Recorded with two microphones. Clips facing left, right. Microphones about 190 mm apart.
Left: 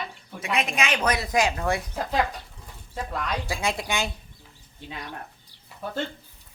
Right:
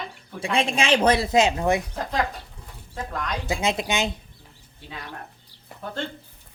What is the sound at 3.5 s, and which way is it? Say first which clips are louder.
Speech: right 3 dB; 20° right (ahead or behind).